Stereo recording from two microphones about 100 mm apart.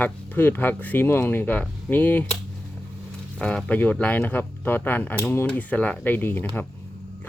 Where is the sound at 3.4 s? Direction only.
10° left (ahead or behind).